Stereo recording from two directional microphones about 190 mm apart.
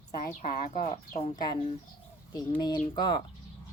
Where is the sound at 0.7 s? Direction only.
40° left (ahead or behind).